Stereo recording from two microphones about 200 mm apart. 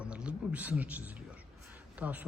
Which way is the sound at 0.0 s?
5° right (ahead or behind).